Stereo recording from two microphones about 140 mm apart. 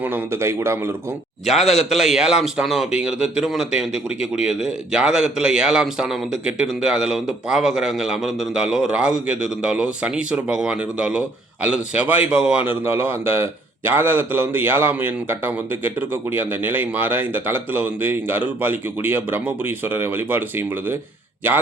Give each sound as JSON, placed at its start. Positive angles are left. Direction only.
{"t": 0.0, "sound": "a man's voice", "side_deg": -15}
{"t": 1.5, "sound": "a man's voice", "side_deg": 0}